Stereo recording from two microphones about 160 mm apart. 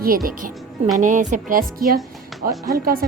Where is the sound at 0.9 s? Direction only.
50° right (ahead or behind).